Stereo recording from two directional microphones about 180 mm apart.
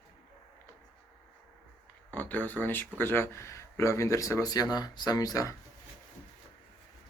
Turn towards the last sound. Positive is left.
turn(degrees=20)  # may be behind; listen again after turning